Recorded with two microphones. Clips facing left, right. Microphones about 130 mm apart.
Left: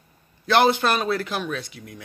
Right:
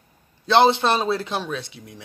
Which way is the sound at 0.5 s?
20° right (ahead or behind).